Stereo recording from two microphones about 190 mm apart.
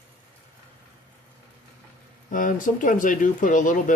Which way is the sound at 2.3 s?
45° left (ahead or behind).